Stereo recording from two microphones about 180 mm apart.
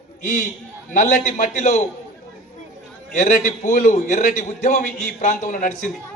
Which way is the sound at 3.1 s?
45° left (ahead or behind).